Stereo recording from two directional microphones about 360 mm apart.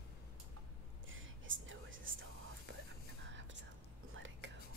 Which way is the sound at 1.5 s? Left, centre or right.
Right.